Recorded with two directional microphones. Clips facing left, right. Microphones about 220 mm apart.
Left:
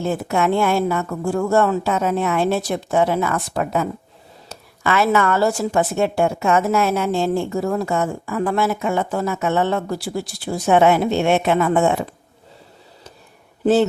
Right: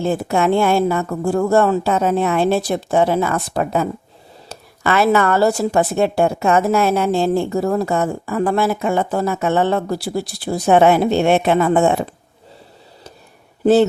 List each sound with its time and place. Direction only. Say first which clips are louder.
0.0 s speech: right 3 dB; 30° right (ahead or behind)